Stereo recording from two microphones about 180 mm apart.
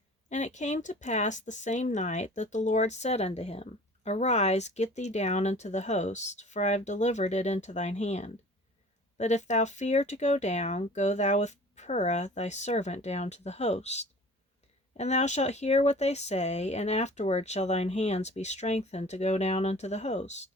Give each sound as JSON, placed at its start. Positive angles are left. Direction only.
{"t": 0.3, "sound": "speech", "side_deg": 40}